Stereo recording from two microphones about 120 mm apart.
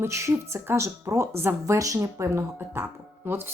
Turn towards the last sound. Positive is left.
turn(degrees=-20)  # may be behind; listen again after turning